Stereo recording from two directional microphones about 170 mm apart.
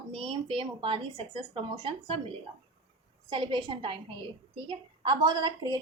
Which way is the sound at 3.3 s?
30° right (ahead or behind).